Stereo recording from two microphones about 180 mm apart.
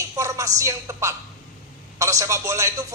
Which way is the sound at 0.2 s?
15° right (ahead or behind).